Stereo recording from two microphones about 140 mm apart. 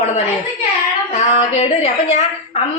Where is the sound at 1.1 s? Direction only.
55° left (ahead or behind).